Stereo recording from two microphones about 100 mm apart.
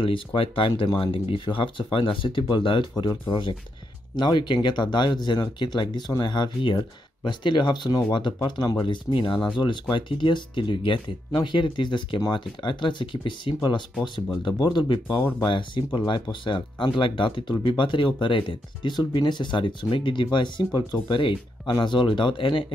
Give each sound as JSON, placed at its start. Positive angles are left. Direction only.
{"t": 0.0, "sound": "speech", "side_deg": 60}